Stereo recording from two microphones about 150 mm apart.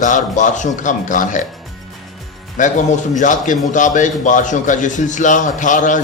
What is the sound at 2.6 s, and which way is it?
A man's voice, 55° left (ahead or behind).